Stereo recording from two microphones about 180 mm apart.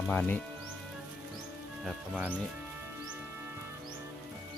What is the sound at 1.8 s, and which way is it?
Speech, 5° right (ahead or behind).